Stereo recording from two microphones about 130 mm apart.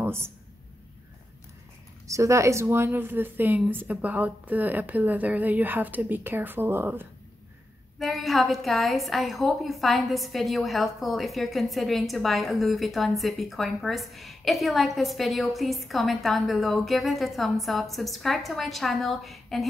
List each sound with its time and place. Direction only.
0.0 s a sound: 20° right (ahead or behind)
2.0 s speech: 25° right (ahead or behind)
8.0 s a woman's voice: centre (ahead or behind)